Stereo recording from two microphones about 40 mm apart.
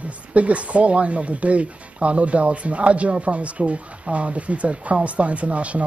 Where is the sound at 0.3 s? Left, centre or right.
Right.